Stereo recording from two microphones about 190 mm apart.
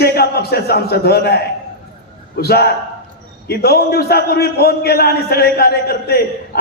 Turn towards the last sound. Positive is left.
turn(degrees=55)  # may be behind; listen again after turning